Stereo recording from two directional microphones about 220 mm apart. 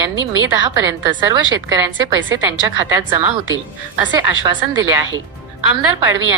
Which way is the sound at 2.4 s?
15° right (ahead or behind).